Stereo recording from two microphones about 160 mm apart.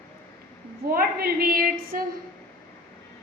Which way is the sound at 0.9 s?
70° right (ahead or behind).